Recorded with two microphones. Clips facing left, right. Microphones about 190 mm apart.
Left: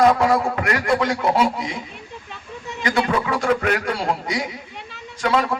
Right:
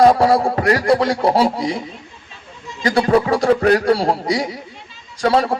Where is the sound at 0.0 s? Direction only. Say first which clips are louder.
Right 4 dB; 35° right (ahead or behind).